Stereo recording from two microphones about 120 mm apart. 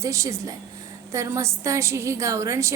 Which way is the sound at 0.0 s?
25° right (ahead or behind).